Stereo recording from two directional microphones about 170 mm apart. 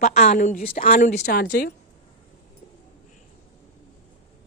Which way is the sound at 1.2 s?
75° left (ahead or behind).